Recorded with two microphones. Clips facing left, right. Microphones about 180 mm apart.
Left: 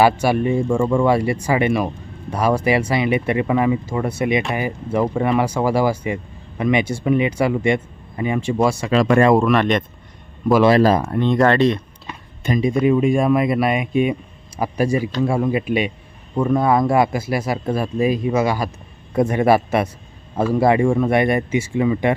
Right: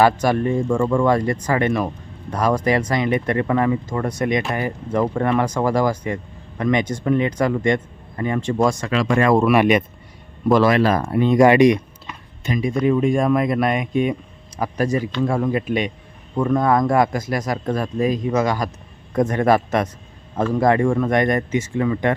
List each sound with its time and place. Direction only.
0.0 s speech: 10° left (ahead or behind)
9.4 s speech: 10° right (ahead or behind)
10.7 s speech: 35° left (ahead or behind)
11.0 s speech: 5° right (ahead or behind)
12.7 s speech: 10° left (ahead or behind)